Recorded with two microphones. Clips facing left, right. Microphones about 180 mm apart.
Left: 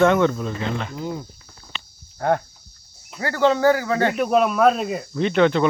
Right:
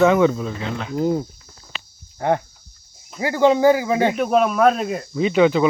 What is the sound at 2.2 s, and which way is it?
Speech, 15° right (ahead or behind).